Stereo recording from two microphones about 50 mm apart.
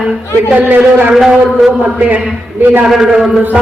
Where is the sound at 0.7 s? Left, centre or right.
Right.